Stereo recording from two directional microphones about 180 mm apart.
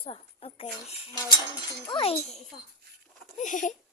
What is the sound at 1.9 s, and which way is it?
Speech, 30° left (ahead or behind).